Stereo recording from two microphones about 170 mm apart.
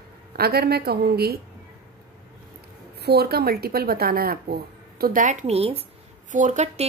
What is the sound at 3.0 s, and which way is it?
A woman's voice, 65° right (ahead or behind).